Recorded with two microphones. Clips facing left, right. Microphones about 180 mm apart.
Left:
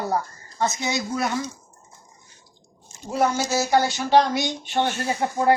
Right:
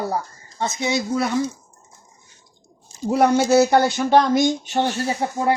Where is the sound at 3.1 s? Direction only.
65° right (ahead or behind); by 4.9 s 40° right (ahead or behind).